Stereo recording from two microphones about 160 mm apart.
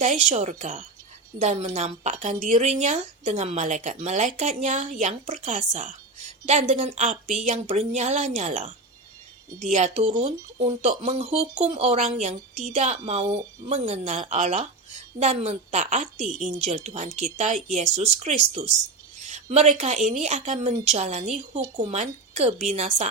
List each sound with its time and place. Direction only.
0.0 s a woman's voice: 45° right (ahead or behind)
9.7 s a woman's voice: 45° right (ahead or behind)